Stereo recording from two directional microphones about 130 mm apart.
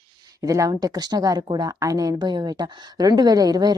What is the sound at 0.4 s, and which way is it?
Speech, 25° right (ahead or behind).